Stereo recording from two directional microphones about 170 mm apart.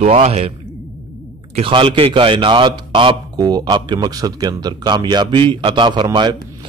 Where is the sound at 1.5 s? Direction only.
30° right (ahead or behind).